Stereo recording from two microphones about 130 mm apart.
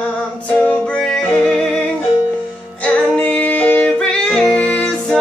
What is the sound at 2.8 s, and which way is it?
Music, 10° left (ahead or behind).